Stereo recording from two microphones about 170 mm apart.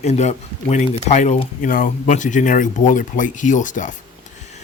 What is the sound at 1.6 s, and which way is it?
Speech, 55° left (ahead or behind).